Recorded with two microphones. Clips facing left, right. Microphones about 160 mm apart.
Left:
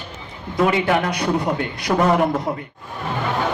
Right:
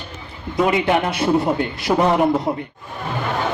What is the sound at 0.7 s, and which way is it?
A man's voice, 25° right (ahead or behind).